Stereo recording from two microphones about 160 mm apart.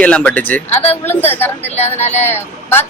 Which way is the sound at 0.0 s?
5° left (ahead or behind).